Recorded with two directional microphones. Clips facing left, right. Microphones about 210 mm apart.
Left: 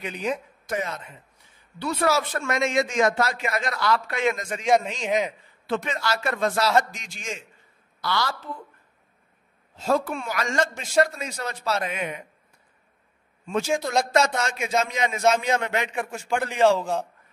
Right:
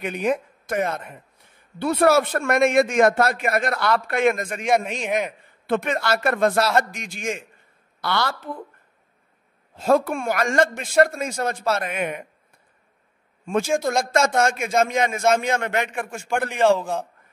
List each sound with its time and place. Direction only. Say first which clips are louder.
0.0 s speech: right 5 dB; 55° right (ahead or behind)
5.0 s a man's voice: even; 10° right (ahead or behind)
5.7 s speech: right 5 dB; 55° right (ahead or behind)
9.8 s speech: right 5 dB; 55° right (ahead or behind)
13.5 s a man's voice: right 3 dB; 50° right (ahead or behind)
16.5 s a man's voice: right 1 dB; centre (ahead or behind)